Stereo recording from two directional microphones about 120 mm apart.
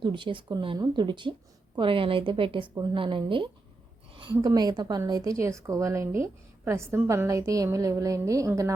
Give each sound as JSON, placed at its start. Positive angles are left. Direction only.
{"t": 0.0, "sound": "a woman's voice", "side_deg": -40}